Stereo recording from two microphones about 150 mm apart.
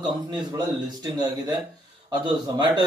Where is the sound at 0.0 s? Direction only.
30° right (ahead or behind).